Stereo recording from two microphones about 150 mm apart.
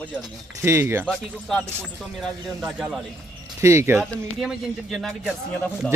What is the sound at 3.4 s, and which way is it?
Speech, 20° right (ahead or behind).